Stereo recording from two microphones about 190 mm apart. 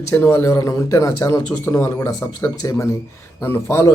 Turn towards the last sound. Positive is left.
turn(degrees=15)  # may be behind; listen again after turning